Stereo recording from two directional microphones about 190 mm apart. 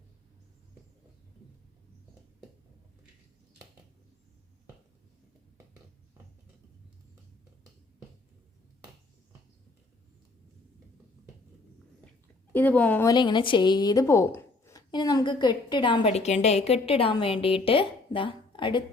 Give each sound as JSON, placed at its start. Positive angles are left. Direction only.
{"t": 12.5, "sound": "speech", "side_deg": 10}
{"t": 13.1, "sound": "speech", "side_deg": 25}